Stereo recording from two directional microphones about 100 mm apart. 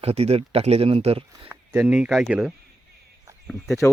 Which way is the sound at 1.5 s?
15° right (ahead or behind).